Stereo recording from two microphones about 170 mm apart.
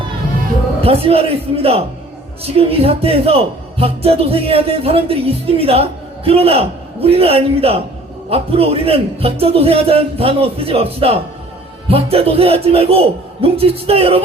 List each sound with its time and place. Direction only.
0.8 s a man's voice: 35° right (ahead or behind)